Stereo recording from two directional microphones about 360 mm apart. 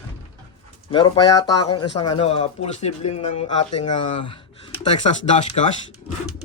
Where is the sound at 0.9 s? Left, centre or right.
Centre.